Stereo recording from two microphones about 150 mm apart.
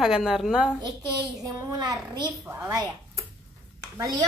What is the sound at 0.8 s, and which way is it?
A child's voice, 25° right (ahead or behind).